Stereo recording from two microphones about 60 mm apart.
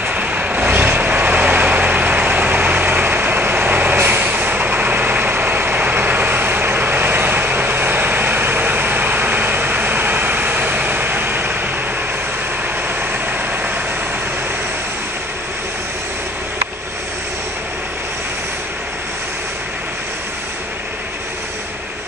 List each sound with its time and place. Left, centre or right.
0.0 s vehicle: right